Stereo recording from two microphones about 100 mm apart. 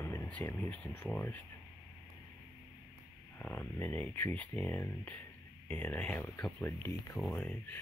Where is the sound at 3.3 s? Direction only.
15° left (ahead or behind).